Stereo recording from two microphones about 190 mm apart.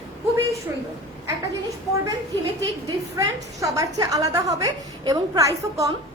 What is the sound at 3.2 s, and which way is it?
A woman's voice, 15° right (ahead or behind).